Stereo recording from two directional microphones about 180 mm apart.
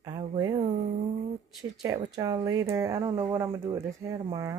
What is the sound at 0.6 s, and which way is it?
Speech, 40° right (ahead or behind).